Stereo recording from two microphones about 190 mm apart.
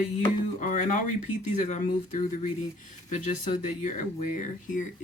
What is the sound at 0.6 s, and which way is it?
Speech, 40° left (ahead or behind).